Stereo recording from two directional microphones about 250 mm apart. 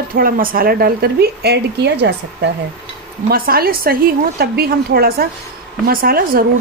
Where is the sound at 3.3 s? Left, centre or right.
Right.